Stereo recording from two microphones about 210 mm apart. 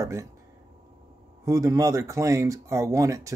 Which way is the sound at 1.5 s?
15° right (ahead or behind).